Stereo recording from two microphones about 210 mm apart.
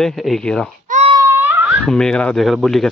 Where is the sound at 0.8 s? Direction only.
35° right (ahead or behind).